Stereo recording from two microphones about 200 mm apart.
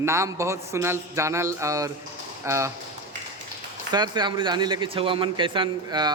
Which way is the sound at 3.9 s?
20° right (ahead or behind).